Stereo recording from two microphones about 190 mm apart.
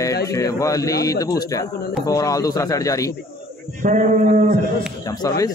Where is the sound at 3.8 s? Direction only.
40° right (ahead or behind).